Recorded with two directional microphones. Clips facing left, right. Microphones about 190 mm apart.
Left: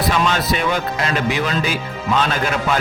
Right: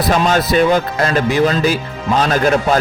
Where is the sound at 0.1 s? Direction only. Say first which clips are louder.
Right 8 dB; 40° right (ahead or behind).